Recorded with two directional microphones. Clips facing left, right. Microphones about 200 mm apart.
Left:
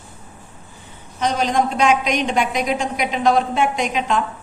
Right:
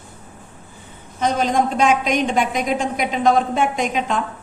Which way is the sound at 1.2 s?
50° right (ahead or behind).